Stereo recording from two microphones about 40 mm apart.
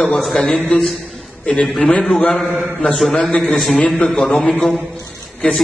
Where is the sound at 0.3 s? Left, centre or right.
Left.